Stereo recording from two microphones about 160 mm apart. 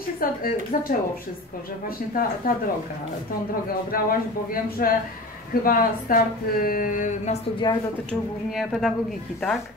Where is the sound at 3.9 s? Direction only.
65° left (ahead or behind).